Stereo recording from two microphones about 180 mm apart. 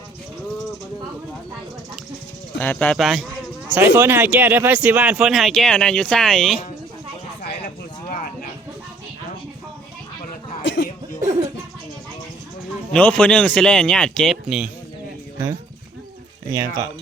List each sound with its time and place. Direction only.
2.6 s speech: 10° left (ahead or behind)
3.8 s speech: 15° right (ahead or behind)
8.1 s a sound: 55° left (ahead or behind)
10.6 s cough: 90° left
12.9 s speech: 5° left (ahead or behind)
16.5 s speech: 20° right (ahead or behind)